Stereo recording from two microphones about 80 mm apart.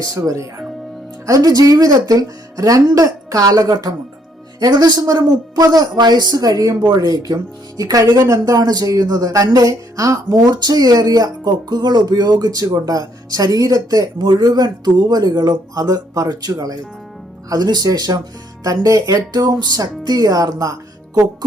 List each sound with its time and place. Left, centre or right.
0.0 s speech: right
6.0 s speech: right